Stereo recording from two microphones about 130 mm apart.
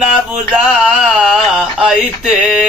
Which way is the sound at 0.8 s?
5° right (ahead or behind).